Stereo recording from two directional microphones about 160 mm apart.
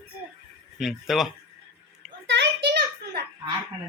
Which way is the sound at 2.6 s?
85° right.